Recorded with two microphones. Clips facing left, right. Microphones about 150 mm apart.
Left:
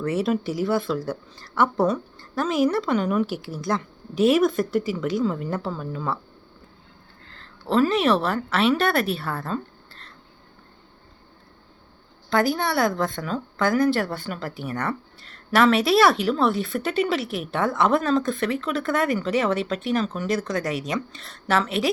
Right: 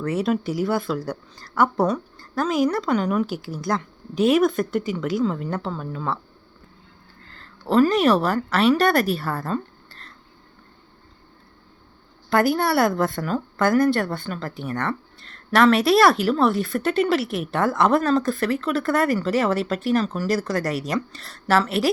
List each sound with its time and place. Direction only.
0.0 s a woman's voice: 5° left (ahead or behind)
7.3 s a woman's voice: centre (ahead or behind)
12.3 s a woman's voice: 5° right (ahead or behind)